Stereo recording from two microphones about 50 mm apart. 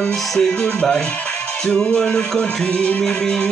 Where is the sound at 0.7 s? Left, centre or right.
Left.